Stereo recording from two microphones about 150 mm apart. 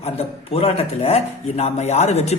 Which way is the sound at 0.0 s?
40° left (ahead or behind).